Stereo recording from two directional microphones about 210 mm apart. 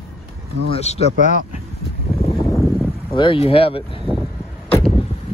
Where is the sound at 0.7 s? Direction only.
30° left (ahead or behind).